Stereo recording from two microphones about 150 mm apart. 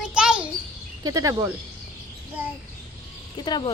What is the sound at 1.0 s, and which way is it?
Speech, 25° right (ahead or behind).